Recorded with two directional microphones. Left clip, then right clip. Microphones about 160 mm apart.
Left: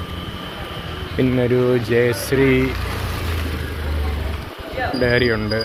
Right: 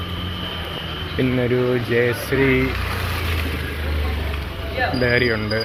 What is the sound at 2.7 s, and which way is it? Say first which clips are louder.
Vehicle: right 2 dB; 65° left (ahead or behind).